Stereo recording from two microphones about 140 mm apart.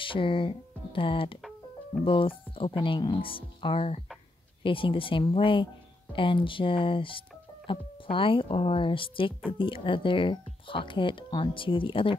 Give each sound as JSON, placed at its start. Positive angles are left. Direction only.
{"t": 0.0, "sound": "speech", "side_deg": 40}